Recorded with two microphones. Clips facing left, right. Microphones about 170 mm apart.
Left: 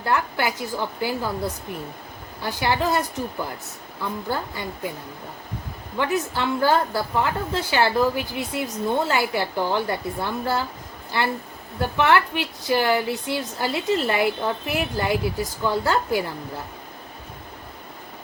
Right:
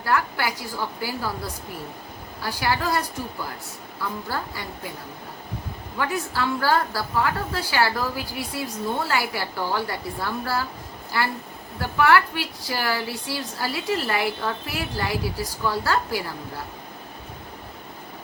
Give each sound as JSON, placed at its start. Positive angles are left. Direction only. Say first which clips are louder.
{"t": 0.0, "sound": "a woman's voice", "louder": "left 1 dB", "side_deg": 20}
{"t": 6.0, "sound": "a woman's voice", "louder": "left 2 dB", "side_deg": 20}